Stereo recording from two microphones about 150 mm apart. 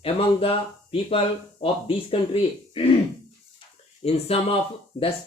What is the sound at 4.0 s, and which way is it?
Speech, 40° left (ahead or behind).